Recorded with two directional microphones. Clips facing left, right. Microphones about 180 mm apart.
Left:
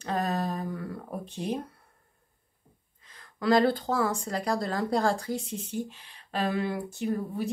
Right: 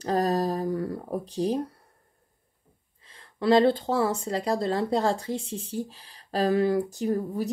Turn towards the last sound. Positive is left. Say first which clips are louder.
# right 3 dB
turn(degrees=-40)  # may be behind; listen again after turning